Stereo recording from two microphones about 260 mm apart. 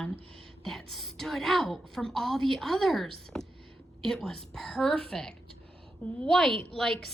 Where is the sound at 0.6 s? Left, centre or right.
Centre.